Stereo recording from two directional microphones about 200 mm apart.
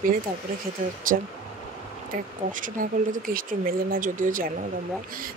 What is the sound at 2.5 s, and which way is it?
Speech, 40° right (ahead or behind).